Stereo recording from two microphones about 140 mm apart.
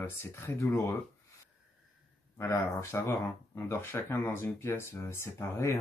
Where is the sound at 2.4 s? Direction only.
20° left (ahead or behind).